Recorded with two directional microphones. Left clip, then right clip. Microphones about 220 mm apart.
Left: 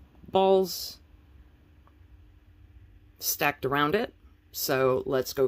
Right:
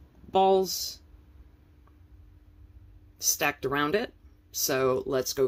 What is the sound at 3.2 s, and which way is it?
Speech, 30° left (ahead or behind).